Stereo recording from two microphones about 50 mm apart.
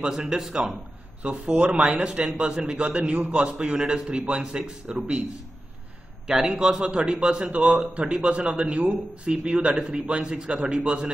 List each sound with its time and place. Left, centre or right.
0.0 s a man's voice: centre
6.2 s a man's voice: centre